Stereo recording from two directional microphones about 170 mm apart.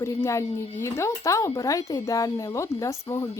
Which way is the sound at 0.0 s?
15° left (ahead or behind).